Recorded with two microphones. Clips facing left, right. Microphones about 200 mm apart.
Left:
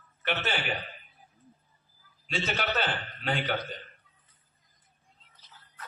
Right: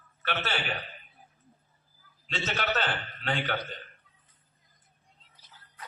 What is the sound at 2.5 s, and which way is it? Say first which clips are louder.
A man's voice: right 1 dB; 10° left (ahead or behind).